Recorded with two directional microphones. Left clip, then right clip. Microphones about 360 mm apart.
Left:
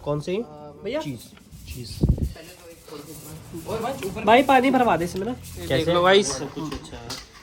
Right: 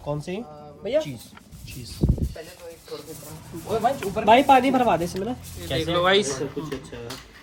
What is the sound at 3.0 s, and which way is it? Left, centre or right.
Speech, centre.